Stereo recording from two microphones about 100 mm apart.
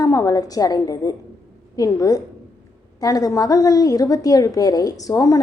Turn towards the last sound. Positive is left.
turn(degrees=35)  # may be behind; listen again after turning